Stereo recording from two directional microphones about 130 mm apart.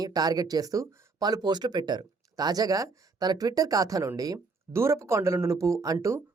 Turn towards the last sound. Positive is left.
turn(degrees=-20)  # may be behind; listen again after turning